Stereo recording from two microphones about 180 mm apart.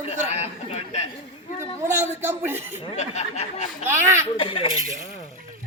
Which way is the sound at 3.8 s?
15° right (ahead or behind).